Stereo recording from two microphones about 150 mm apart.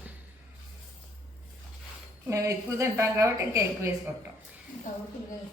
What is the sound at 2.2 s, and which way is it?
A woman's voice, 20° right (ahead or behind).